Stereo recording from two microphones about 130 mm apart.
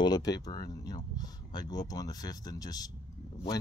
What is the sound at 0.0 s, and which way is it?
Speech, 30° left (ahead or behind).